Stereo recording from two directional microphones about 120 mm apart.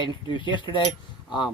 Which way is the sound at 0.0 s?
40° left (ahead or behind).